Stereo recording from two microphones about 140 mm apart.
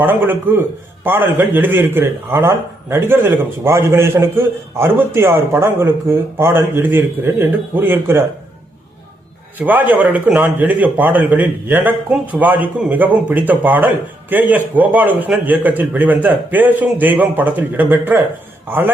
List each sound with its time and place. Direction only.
0.0 s a man's voice: 15° right (ahead or behind)
9.6 s a man's voice: 15° right (ahead or behind)